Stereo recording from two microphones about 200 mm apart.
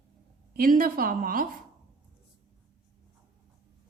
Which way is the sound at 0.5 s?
45° right (ahead or behind).